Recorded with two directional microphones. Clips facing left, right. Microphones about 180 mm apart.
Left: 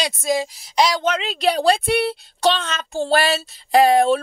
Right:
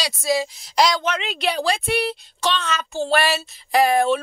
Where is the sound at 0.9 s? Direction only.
35° left (ahead or behind).